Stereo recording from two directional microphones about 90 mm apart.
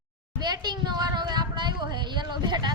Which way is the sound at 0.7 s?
55° right (ahead or behind).